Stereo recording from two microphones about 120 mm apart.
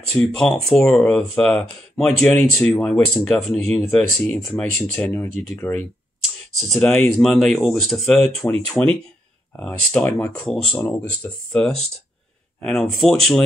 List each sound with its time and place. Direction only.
0.3 s speech: 5° left (ahead or behind)
7.2 s speech: 5° left (ahead or behind)
10.8 s speech: 20° left (ahead or behind); by 13.4 s centre (ahead or behind)